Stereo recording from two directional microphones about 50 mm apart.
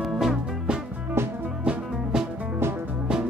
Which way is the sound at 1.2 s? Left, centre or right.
Right.